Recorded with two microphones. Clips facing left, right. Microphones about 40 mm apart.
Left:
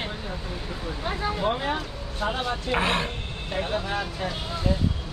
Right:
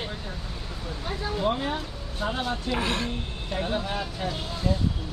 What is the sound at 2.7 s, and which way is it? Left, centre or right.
Speech, left.